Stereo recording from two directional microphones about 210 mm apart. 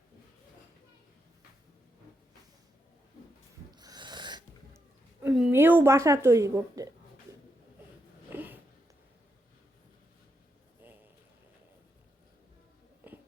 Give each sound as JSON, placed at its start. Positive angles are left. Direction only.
{"t": 3.7, "sound": "a sound", "side_deg": -20}
{"t": 5.2, "sound": "a woman's voice", "side_deg": -5}
{"t": 8.3, "sound": "sniff", "side_deg": -10}